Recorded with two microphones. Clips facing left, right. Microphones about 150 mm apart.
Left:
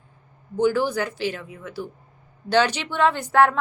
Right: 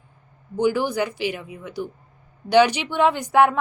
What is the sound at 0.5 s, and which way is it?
A woman's voice, 15° right (ahead or behind).